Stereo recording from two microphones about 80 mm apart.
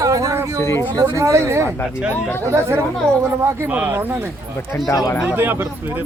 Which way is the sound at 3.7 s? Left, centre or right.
Right.